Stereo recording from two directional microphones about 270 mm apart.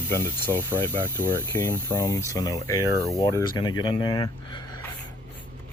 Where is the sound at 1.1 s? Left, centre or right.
Centre.